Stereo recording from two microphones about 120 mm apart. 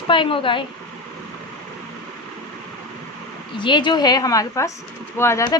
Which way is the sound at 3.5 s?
40° left (ahead or behind).